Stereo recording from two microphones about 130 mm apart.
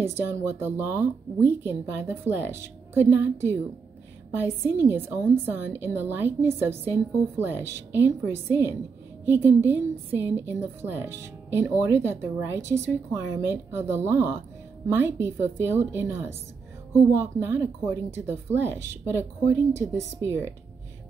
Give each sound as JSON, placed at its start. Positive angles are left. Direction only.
{"t": 0.0, "sound": "speech", "side_deg": -20}
{"t": 4.3, "sound": "speech", "side_deg": -15}
{"t": 17.4, "sound": "speech", "side_deg": -20}